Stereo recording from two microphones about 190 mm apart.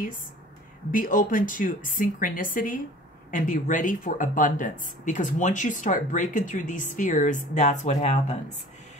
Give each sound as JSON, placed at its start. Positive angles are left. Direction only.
{"t": 0.9, "sound": "a woman's voice", "side_deg": 45}